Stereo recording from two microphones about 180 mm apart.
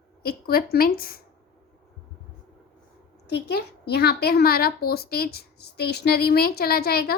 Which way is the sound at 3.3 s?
65° left (ahead or behind).